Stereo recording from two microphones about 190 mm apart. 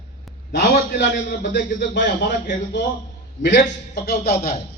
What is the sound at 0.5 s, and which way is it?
A man's voice, 60° left (ahead or behind).